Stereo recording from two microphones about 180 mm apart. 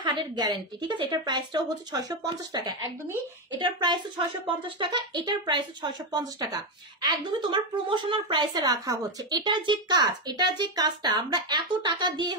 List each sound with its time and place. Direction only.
0.0 s speech: 25° right (ahead or behind)